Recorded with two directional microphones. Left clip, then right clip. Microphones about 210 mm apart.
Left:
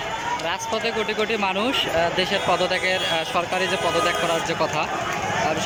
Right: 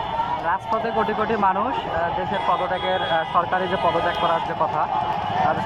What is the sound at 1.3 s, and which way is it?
Speech, 15° left (ahead or behind).